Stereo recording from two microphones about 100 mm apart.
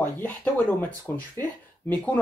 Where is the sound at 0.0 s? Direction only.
15° left (ahead or behind).